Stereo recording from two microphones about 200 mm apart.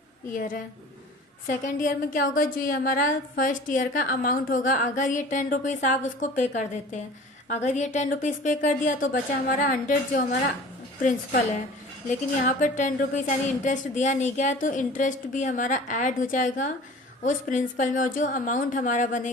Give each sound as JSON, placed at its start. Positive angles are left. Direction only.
{"t": 0.3, "sound": "a woman's voice", "side_deg": 40}
{"t": 12.5, "sound": "a woman's voice", "side_deg": 40}